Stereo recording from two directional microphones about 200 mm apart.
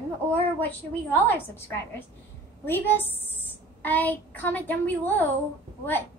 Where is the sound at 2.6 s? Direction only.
10° left (ahead or behind).